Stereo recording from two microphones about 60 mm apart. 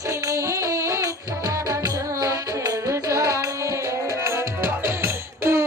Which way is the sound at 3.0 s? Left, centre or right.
Right.